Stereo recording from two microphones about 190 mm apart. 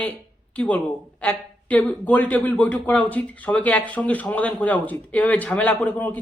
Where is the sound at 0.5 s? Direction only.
5° left (ahead or behind).